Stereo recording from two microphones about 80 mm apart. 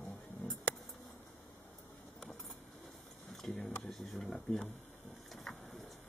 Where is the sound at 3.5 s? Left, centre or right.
Centre.